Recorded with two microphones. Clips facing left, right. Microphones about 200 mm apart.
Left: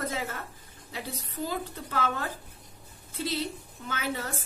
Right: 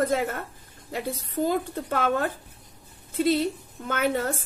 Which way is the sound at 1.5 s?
50° right (ahead or behind).